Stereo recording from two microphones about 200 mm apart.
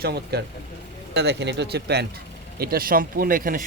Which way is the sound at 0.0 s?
50° right (ahead or behind).